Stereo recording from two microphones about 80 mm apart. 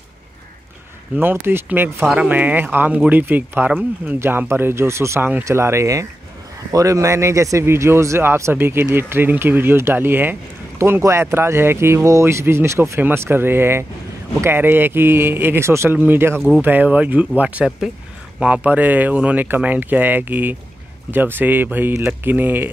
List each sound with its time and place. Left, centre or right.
1.1 s speech: right
10.8 s speech: right
16.3 s speech: centre
16.6 s speech: right
17.6 s speech: centre; by 22.7 s right